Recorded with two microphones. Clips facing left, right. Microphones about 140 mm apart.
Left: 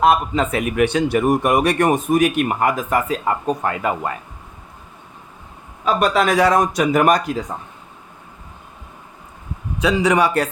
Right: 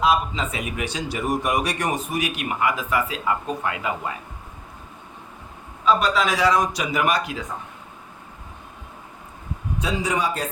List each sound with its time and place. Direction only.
0.0 s a man's voice: 55° left (ahead or behind)
5.8 s a man's voice: 55° left (ahead or behind)
9.8 s a man's voice: 75° left (ahead or behind)